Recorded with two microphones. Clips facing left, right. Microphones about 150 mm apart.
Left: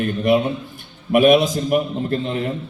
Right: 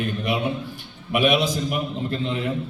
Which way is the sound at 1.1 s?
50° left (ahead or behind).